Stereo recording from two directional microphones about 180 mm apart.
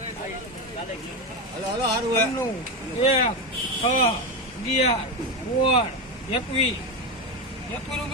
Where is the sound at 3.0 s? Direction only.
35° left (ahead or behind).